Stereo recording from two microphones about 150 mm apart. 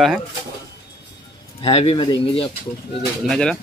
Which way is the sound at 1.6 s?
40° left (ahead or behind).